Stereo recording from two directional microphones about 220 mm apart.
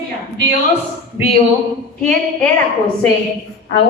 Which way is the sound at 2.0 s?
5° left (ahead or behind).